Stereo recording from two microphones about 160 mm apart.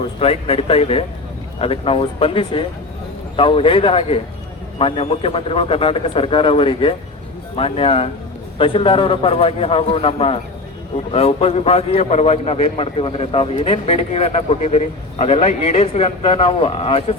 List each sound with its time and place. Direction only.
0.0 s a man's voice: 35° left (ahead or behind)